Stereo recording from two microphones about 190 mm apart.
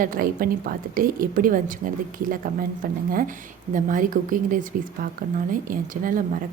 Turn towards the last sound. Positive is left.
turn(degrees=-45)  # may be behind; listen again after turning